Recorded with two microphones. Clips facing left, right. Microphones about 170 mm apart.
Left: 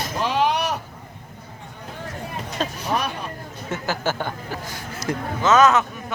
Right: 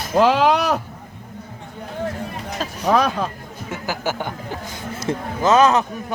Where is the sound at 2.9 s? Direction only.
90° right.